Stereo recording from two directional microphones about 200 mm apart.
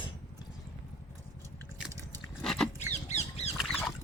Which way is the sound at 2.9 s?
35° left (ahead or behind).